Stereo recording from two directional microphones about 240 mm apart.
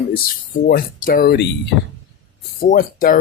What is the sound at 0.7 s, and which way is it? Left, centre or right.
Speech, left.